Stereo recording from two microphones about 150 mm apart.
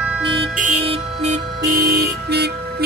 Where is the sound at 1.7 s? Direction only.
90° right.